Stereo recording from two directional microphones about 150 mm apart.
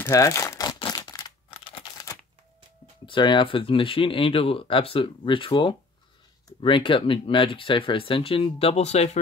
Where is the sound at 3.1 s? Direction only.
30° left (ahead or behind).